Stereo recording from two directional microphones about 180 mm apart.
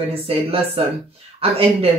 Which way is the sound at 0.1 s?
35° right (ahead or behind).